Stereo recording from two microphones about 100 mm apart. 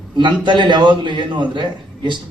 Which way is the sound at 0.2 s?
55° right (ahead or behind).